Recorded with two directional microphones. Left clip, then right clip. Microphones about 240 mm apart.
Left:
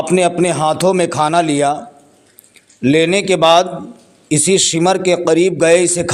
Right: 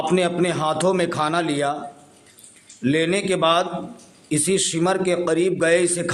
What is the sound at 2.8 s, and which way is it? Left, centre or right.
A man's voice, left.